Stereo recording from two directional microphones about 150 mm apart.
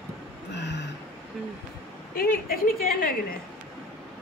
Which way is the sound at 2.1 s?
75° left (ahead or behind).